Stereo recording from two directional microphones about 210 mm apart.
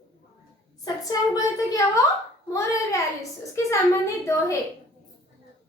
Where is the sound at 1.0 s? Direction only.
15° left (ahead or behind).